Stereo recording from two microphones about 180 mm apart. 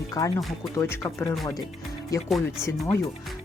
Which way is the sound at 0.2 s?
20° left (ahead or behind).